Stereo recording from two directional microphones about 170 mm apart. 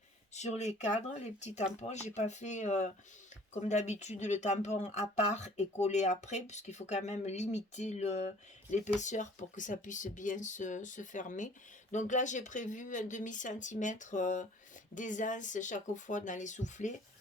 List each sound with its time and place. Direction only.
0.3 s speech: 40° left (ahead or behind)